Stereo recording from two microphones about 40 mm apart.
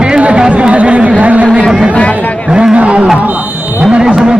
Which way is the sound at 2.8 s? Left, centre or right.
Right.